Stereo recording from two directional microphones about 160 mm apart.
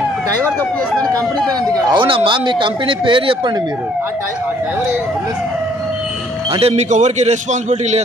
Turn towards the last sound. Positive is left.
turn(degrees=-45)  # may be behind; listen again after turning